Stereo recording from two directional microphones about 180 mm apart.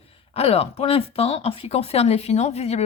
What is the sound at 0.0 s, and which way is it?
Speech, 30° left (ahead or behind).